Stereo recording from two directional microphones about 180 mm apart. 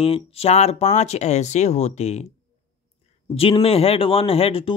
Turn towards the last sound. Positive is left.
turn(degrees=35)  # may be behind; listen again after turning